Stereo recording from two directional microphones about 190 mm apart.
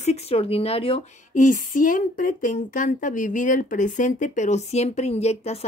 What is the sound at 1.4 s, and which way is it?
A woman's voice, 45° left (ahead or behind).